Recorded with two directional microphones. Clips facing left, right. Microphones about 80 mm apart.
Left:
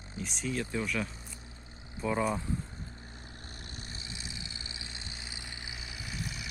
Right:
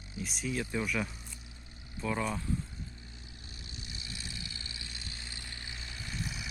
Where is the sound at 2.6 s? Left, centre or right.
Left.